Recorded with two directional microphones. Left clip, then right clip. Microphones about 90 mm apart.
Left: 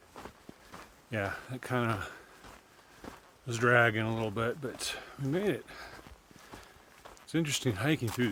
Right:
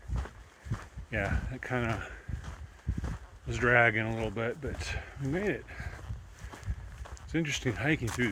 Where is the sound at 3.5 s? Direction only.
30° left (ahead or behind).